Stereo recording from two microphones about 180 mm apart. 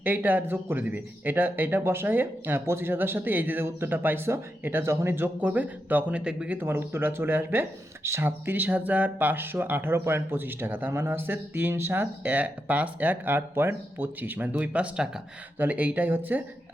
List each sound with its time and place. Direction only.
0.0 s speech: 10° right (ahead or behind)